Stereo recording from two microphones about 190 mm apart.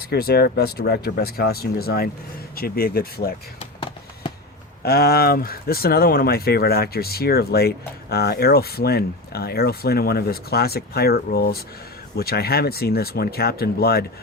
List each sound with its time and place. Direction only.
0.0 s speech: 55° left (ahead or behind)
4.2 s a sound: 25° left (ahead or behind)
4.8 s speech: 55° left (ahead or behind)